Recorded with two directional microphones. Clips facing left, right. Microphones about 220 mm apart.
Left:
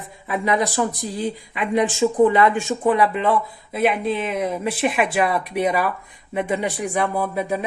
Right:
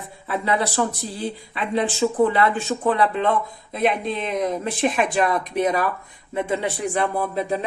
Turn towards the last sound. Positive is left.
turn(degrees=10)  # may be behind; listen again after turning